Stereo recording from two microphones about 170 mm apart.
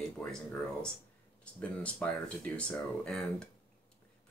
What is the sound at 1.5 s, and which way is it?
Speech, 5° left (ahead or behind).